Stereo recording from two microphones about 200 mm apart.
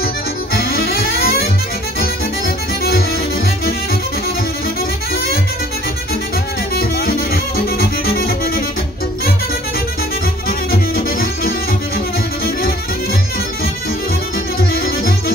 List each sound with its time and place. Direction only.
0.6 s music: 50° left (ahead or behind)
6.7 s music: 50° left (ahead or behind)
10.7 s music: 50° left (ahead or behind)
14.6 s music: 50° left (ahead or behind)